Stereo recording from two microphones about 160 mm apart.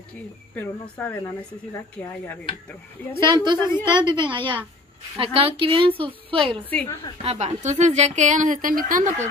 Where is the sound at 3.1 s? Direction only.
30° right (ahead or behind); by 9.1 s 55° right (ahead or behind).